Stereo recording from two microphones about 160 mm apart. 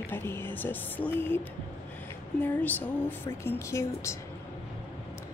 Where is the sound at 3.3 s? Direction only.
15° left (ahead or behind).